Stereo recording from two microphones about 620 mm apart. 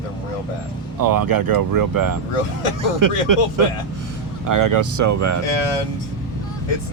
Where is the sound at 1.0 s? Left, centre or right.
Right.